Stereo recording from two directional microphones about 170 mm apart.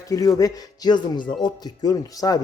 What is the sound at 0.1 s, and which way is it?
A man's voice, 20° left (ahead or behind).